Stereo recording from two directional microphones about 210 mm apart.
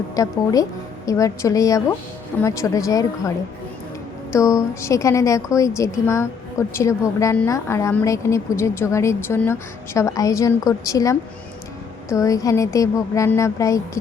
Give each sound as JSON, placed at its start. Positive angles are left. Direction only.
{"t": 0.2, "sound": "a woman's voice", "side_deg": 15}